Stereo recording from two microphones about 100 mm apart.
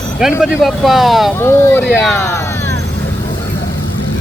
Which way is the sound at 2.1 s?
25° left (ahead or behind).